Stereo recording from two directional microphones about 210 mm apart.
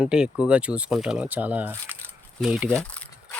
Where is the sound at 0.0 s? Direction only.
5° right (ahead or behind).